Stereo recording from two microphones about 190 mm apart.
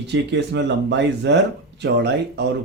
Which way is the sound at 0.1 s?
65° right (ahead or behind).